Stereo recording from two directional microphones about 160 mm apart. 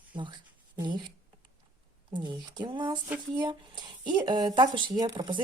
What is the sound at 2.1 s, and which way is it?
Speech, 30° right (ahead or behind).